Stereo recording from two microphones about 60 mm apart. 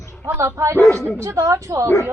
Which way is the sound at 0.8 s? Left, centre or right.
Left.